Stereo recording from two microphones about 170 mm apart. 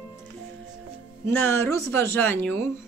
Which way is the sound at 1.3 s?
15° left (ahead or behind).